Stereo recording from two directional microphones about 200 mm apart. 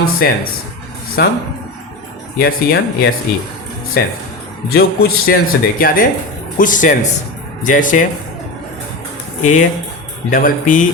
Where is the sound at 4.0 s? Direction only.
50° left (ahead or behind).